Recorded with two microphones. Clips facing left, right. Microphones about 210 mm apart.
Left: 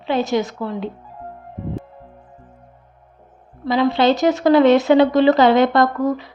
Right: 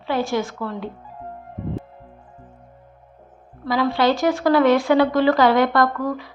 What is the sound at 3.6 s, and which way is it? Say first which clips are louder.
A woman's voice: left 3 dB; 25° left (ahead or behind).